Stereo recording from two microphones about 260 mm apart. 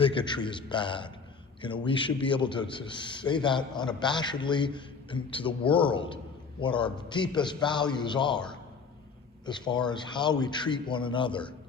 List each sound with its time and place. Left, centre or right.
0.0 s a man's voice: centre
9.5 s a man's voice: centre